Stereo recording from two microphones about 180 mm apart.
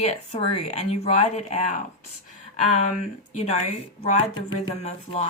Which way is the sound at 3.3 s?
35° left (ahead or behind).